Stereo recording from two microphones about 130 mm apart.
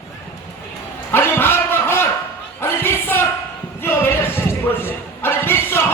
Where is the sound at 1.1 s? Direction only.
15° left (ahead or behind).